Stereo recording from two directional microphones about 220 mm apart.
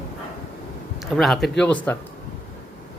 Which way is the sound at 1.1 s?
Centre (ahead or behind).